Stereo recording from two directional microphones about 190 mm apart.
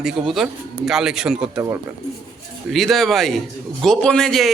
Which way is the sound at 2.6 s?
Centre (ahead or behind).